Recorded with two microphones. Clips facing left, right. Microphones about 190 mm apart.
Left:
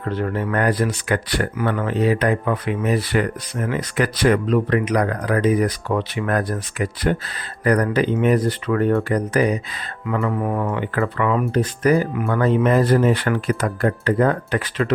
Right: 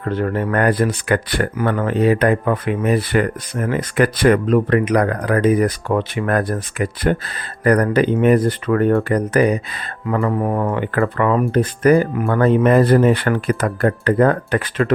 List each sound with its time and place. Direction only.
0.0 s speech: 55° right (ahead or behind)
1.5 s speech: 45° right (ahead or behind)
10.2 s speech: 40° right (ahead or behind)
10.8 s speech: 50° right (ahead or behind)